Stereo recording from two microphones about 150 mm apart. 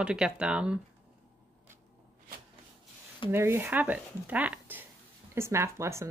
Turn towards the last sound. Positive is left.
turn(degrees=-20)  # may be behind; listen again after turning